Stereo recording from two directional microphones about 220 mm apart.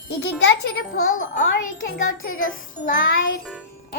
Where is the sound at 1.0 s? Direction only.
65° left (ahead or behind).